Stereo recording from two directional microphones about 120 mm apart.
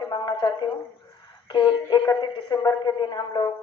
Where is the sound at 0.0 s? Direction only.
40° left (ahead or behind).